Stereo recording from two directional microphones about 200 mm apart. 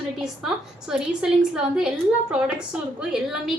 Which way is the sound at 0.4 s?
5° right (ahead or behind).